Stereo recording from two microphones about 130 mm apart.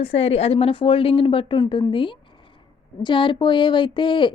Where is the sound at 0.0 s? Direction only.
50° left (ahead or behind).